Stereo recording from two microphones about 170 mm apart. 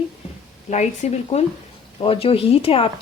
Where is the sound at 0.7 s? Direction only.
40° left (ahead or behind).